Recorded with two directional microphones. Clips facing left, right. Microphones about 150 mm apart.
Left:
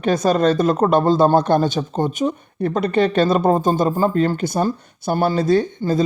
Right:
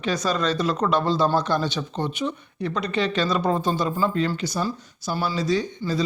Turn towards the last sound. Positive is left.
turn(degrees=50)  # may be behind; listen again after turning